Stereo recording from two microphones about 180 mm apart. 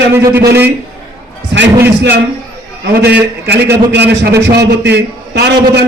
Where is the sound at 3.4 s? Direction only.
70° right (ahead or behind).